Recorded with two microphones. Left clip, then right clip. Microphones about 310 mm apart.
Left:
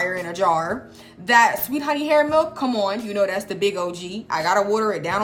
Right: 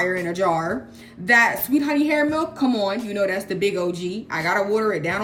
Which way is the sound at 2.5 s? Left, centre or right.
Left.